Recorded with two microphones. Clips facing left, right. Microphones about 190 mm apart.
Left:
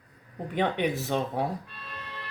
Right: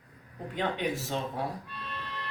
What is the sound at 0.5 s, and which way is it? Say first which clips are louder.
Speech: left 4 dB; 65° left (ahead or behind).